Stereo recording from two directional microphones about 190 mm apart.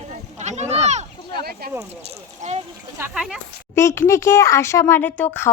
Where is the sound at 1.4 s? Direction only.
55° right (ahead or behind).